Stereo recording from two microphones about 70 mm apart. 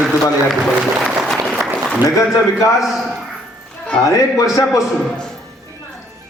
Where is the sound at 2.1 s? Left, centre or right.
Left.